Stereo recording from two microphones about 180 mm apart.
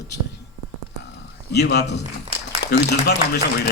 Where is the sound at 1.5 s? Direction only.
65° left (ahead or behind).